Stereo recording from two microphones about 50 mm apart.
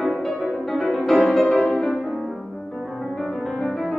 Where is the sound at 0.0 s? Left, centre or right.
Centre.